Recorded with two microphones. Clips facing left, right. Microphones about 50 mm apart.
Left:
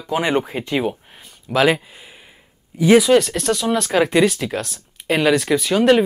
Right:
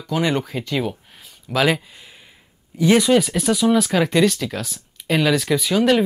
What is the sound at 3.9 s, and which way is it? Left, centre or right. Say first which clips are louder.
Speech: left 2 dB; centre.